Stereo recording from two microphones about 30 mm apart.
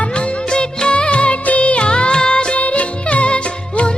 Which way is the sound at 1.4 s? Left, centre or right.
Left.